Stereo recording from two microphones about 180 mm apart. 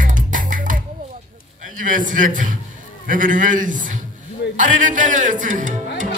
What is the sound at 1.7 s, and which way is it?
Speech, 45° right (ahead or behind).